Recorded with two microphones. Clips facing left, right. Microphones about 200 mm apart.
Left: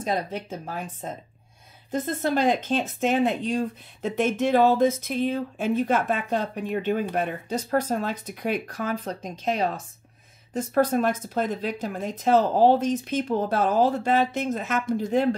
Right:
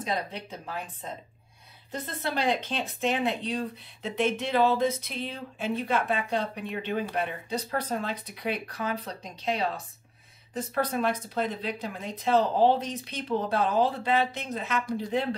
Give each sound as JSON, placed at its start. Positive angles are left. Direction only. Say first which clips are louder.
{"t": 0.0, "sound": "speech", "louder": "left 4 dB", "side_deg": 45}